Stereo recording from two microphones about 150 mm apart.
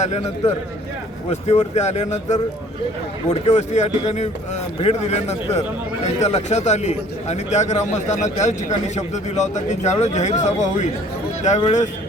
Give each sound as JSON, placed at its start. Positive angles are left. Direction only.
{"t": 1.3, "sound": "a man's voice", "side_deg": 45}